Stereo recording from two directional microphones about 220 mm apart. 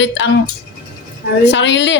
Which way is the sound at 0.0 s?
55° left (ahead or behind).